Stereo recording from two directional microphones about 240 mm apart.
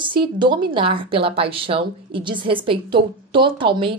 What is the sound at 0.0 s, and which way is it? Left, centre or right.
A woman's voice, centre.